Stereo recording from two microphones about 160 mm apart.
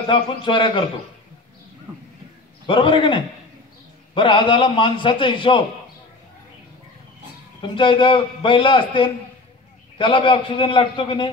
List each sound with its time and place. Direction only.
0.1 s a man's voice: 30° left (ahead or behind)
2.6 s a man's voice: 30° left (ahead or behind)
7.6 s a man's voice: 30° left (ahead or behind)